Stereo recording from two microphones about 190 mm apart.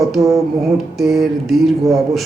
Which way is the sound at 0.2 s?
15° right (ahead or behind).